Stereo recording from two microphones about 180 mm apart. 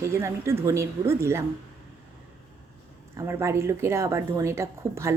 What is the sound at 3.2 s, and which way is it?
A woman's voice, 15° right (ahead or behind).